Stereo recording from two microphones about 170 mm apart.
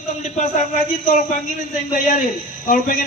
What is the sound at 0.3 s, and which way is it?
A man's voice, 45° left (ahead or behind).